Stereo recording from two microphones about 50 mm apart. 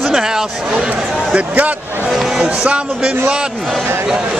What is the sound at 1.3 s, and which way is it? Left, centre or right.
Speech, right.